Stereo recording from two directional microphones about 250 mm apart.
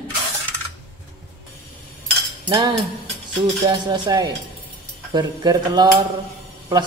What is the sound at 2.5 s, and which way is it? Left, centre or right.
Speech, centre.